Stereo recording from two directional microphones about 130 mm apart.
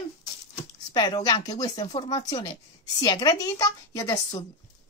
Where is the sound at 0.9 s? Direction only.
30° left (ahead or behind).